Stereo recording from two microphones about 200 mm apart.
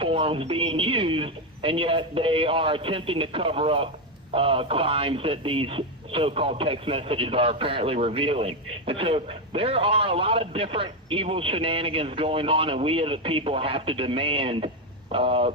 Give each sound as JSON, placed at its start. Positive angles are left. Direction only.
{"t": 0.0, "sound": "a man's voice", "side_deg": -25}